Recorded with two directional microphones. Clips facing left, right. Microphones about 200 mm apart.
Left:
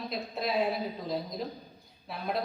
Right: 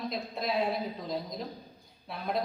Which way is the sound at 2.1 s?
Centre (ahead or behind).